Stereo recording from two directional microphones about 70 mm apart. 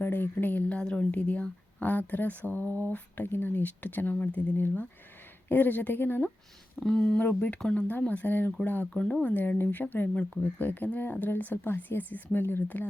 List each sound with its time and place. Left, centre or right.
0.0 s speech: left
0.8 s speech: centre; by 6.3 s left
6.7 s speech: centre; by 12.8 s left